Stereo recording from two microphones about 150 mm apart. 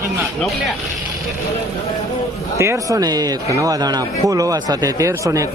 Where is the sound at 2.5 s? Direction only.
20° right (ahead or behind).